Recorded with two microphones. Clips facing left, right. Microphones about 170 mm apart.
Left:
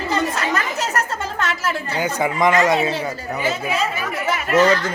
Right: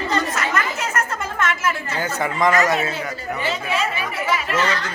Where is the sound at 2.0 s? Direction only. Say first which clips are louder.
Left 4 dB; 15° left (ahead or behind).